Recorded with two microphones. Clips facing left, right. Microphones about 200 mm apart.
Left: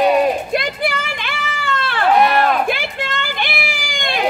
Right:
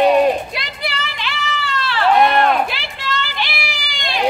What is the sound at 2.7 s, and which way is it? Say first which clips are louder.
Children playing: left 4 dB; 50° left (ahead or behind).